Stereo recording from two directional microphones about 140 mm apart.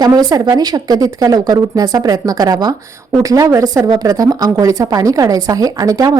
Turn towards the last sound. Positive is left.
turn(degrees=-25)  # may be behind; listen again after turning